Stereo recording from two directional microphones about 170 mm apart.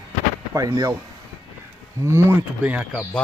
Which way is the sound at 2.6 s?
10° right (ahead or behind).